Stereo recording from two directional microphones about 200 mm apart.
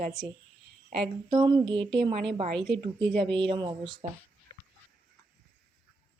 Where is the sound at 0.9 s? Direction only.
20° right (ahead or behind).